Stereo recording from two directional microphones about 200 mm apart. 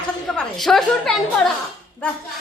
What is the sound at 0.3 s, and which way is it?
Speech, centre (ahead or behind).